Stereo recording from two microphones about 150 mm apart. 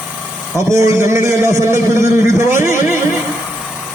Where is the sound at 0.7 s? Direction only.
20° right (ahead or behind).